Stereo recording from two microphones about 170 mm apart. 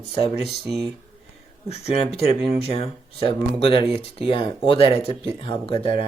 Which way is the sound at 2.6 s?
35° left (ahead or behind).